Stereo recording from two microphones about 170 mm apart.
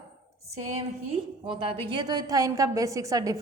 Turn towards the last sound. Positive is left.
turn(degrees=-20)  # may be behind; listen again after turning